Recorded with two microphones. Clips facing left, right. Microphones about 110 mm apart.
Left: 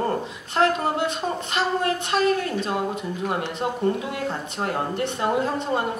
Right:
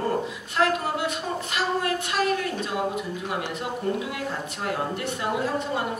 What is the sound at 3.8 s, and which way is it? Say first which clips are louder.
Speech: left 3 dB; 30° left (ahead or behind).